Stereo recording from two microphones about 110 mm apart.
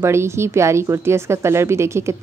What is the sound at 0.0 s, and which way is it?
A woman's voice, 25° right (ahead or behind).